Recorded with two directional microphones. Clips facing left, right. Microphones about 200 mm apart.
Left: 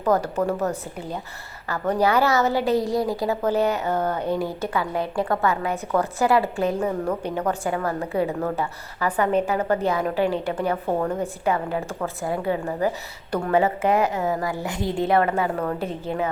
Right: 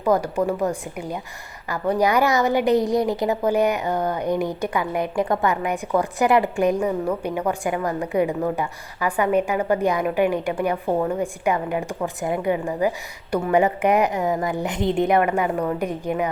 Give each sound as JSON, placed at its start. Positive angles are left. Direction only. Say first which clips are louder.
{"t": 0.0, "sound": "a woman's voice", "louder": "right 1 dB", "side_deg": -10}